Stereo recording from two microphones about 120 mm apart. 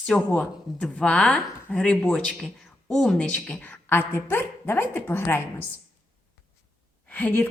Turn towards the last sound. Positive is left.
turn(degrees=15)  # may be behind; listen again after turning